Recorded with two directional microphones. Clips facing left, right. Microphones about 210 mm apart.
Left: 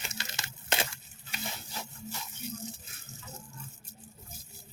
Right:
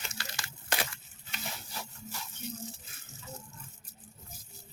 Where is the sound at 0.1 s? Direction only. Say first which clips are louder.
Left 1 dB; 20° left (ahead or behind).